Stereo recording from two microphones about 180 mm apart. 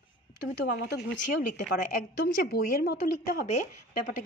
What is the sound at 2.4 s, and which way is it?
A woman's voice, 60° left (ahead or behind).